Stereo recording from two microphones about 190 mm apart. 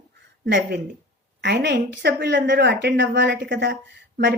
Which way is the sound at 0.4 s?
65° right (ahead or behind).